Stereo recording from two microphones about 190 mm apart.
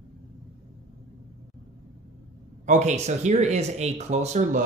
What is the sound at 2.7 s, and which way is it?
Speech, 40° right (ahead or behind).